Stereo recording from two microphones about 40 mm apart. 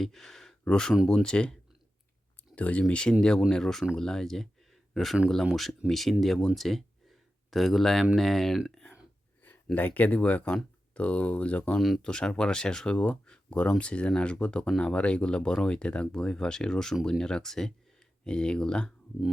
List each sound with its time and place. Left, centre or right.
0.0 s speech: centre; by 1.5 s left
2.6 s speech: left
2.8 s speech: left
5.9 s speech: centre
7.1 s a sound: centre
8.1 s speech: centre
9.7 s speech: left
12.0 s speech: left